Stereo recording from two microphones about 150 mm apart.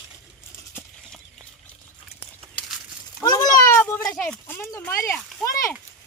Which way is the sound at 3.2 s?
25° left (ahead or behind).